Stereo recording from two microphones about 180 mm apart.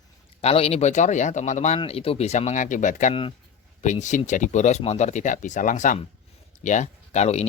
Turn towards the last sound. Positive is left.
turn(degrees=40)  # may be behind; listen again after turning